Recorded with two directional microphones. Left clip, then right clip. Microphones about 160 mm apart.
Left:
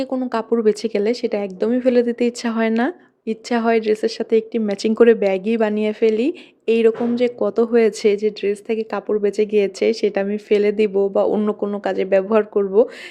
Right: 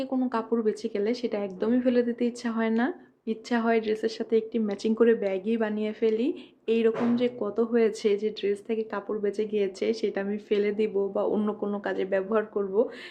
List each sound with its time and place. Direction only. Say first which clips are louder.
0.1 s speech: left 7 dB; 45° left (ahead or behind)
11.3 s speech: left 8 dB; 40° left (ahead or behind); by 12.9 s 55° left (ahead or behind)